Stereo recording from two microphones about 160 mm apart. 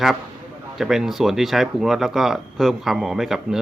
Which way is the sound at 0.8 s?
Centre (ahead or behind).